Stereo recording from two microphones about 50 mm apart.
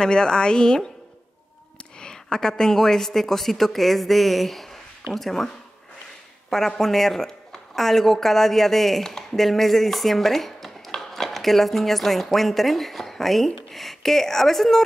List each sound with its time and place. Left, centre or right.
0.0 s speech: centre
2.0 s a woman's voice: centre
6.8 s speech: centre